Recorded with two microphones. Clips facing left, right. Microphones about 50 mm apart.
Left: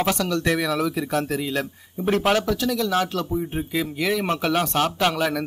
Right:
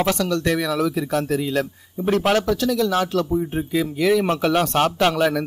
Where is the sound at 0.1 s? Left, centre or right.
Left.